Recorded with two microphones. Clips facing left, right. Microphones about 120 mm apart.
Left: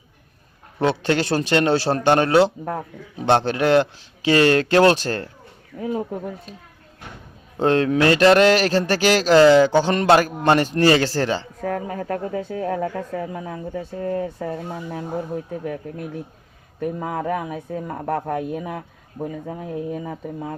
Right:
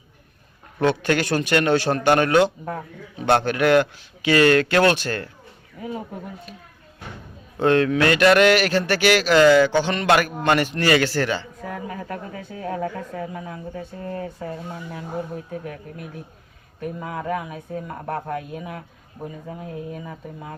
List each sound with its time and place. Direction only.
0.8 s a man's voice: 30° left (ahead or behind)
11.6 s a man's voice: 50° left (ahead or behind); by 14.3 s 30° left (ahead or behind)
14.3 s a man's voice: 40° left (ahead or behind)